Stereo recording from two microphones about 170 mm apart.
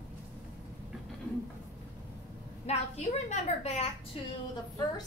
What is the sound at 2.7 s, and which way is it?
A woman's voice, 40° left (ahead or behind).